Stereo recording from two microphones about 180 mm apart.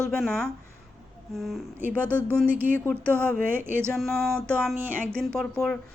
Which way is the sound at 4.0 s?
Centre (ahead or behind).